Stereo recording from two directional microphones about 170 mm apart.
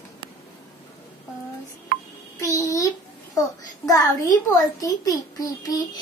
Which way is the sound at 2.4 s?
20° left (ahead or behind).